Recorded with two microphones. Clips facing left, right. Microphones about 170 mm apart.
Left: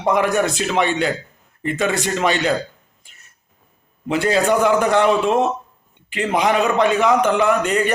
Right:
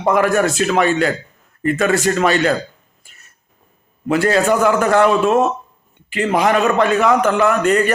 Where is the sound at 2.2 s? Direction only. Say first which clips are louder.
Right 1 dB; 15° left (ahead or behind).